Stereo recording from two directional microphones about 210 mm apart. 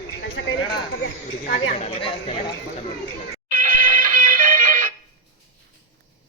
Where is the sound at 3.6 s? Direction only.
40° right (ahead or behind).